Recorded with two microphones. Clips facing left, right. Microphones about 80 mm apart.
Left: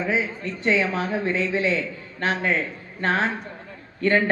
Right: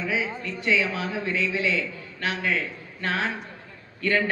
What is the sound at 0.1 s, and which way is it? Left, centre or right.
A man's voice, left.